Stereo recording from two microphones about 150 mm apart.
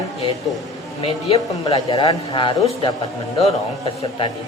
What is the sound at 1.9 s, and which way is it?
Speech, 35° left (ahead or behind).